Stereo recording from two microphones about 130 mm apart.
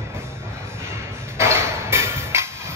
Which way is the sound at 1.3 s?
20° right (ahead or behind).